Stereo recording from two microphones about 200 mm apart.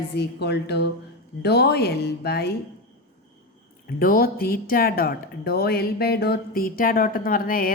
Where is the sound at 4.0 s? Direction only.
45° left (ahead or behind).